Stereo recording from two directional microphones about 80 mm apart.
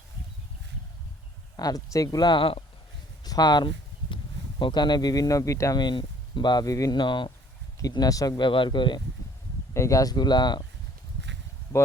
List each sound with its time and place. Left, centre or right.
1.5 s speech: left
2.2 s speech: left
3.2 s speech: left
5.7 s speech: left
6.7 s speech: left
6.9 s speech: left
7.8 s speech: left
8.4 s a man's voice: left
9.7 s speech: left